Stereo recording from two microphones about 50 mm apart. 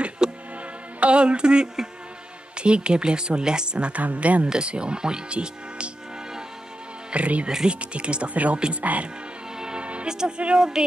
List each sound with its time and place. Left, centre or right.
0.2 s music: centre
0.9 s speech: right
7.1 s speech: right
7.4 s speech: centre
9.6 s music: centre